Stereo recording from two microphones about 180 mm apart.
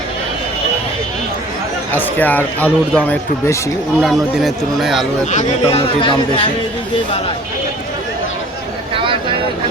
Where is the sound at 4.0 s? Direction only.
Centre (ahead or behind).